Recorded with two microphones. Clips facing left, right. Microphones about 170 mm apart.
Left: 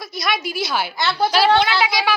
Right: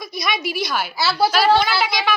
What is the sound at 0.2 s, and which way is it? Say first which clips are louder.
Speech: even; centre (ahead or behind).